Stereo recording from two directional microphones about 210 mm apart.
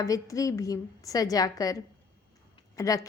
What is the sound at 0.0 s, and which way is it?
A woman's voice, 15° left (ahead or behind).